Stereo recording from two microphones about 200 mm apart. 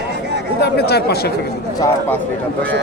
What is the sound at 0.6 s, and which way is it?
Speech, 55° left (ahead or behind).